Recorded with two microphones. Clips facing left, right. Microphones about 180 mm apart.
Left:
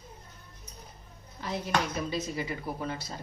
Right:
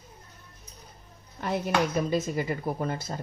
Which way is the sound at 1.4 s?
55° right (ahead or behind).